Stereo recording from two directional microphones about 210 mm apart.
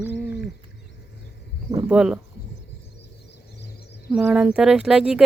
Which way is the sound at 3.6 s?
50° left (ahead or behind).